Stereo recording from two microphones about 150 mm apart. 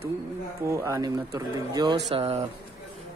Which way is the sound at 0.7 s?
20° right (ahead or behind).